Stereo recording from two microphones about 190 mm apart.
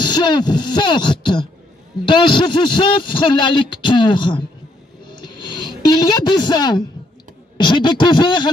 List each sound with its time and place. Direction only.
0.0 s a man's voice: 25° left (ahead or behind)
5.0 s a sound: 25° left (ahead or behind)
7.5 s a man's voice: 25° left (ahead or behind)